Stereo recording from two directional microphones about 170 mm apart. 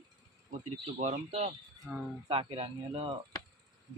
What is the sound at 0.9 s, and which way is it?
Speech, 40° right (ahead or behind).